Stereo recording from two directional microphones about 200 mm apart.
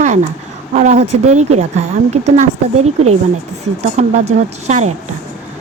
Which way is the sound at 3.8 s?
35° right (ahead or behind).